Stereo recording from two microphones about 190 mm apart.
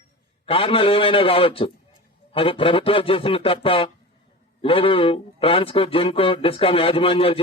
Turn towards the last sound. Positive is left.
turn(degrees=30)  # may be behind; listen again after turning